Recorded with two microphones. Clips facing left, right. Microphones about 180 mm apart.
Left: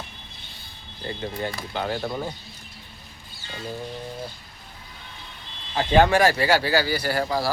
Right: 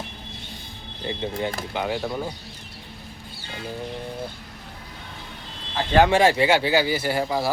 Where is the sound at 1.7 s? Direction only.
10° right (ahead or behind).